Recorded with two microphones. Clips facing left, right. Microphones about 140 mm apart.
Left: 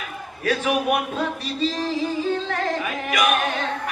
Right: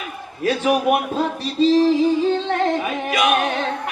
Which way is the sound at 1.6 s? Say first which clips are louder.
Right 9 dB; 30° right (ahead or behind).